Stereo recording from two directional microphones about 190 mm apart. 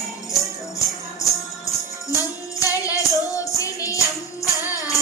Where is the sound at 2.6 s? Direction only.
15° left (ahead or behind).